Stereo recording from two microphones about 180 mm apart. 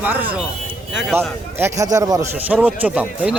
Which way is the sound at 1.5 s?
15° right (ahead or behind).